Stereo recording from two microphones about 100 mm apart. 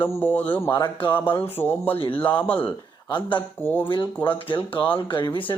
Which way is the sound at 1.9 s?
65° left (ahead or behind).